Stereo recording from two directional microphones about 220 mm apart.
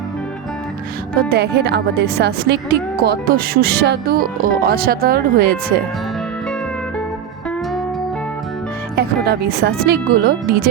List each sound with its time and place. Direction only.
1.3 s speech: 45° right (ahead or behind)
9.0 s speech: 45° right (ahead or behind)